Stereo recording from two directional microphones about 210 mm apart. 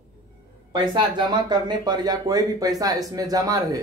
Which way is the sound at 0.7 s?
20° right (ahead or behind).